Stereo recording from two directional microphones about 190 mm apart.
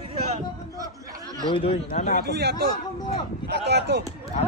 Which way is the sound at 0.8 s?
20° right (ahead or behind).